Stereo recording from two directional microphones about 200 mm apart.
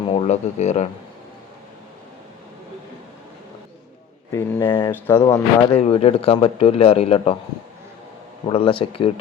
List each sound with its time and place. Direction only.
0.2 s speech: 35° left (ahead or behind)
4.3 s speech: 10° left (ahead or behind)
5.8 s speech: 30° left (ahead or behind)
8.4 s speech: 25° left (ahead or behind)